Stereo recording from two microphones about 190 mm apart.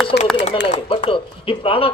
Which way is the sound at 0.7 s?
35° left (ahead or behind).